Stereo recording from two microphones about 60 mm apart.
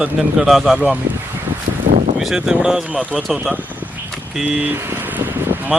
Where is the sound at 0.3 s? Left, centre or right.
Centre.